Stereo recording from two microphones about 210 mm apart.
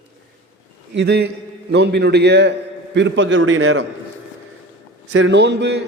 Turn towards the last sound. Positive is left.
turn(degrees=-55)  # may be behind; listen again after turning